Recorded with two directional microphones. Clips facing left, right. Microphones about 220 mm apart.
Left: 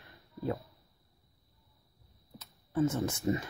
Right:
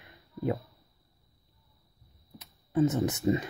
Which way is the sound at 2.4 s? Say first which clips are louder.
Right 4 dB; 20° right (ahead or behind).